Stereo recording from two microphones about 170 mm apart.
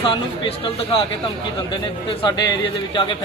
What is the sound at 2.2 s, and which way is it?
Speech, 25° left (ahead or behind).